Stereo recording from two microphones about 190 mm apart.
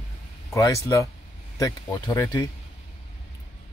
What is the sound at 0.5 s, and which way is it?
Speech, 15° left (ahead or behind).